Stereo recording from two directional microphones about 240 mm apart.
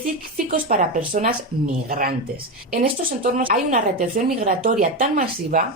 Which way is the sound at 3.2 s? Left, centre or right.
Right.